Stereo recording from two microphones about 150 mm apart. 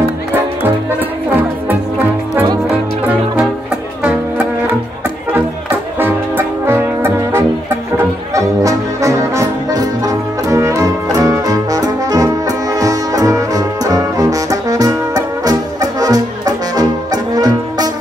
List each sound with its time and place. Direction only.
5.9 s music: 15° right (ahead or behind)